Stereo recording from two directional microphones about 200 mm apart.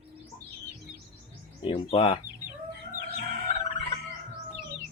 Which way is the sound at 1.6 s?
25° left (ahead or behind).